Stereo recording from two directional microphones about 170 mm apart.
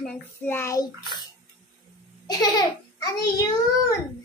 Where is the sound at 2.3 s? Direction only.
25° left (ahead or behind).